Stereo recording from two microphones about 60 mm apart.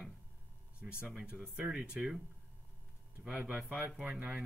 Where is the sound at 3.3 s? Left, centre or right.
Centre.